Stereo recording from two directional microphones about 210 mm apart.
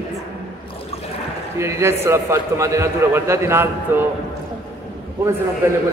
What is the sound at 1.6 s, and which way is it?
A man's voice, 15° right (ahead or behind).